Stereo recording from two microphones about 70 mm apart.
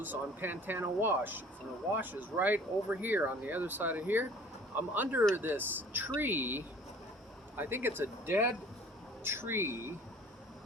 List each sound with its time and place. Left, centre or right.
0.0 s speech: right